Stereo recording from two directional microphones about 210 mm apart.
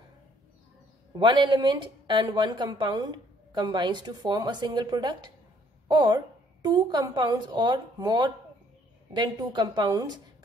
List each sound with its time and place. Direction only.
1.1 s a woman's voice: 20° right (ahead or behind)